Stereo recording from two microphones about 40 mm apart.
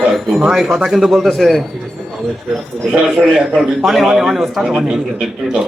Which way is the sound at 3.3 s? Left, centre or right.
Centre.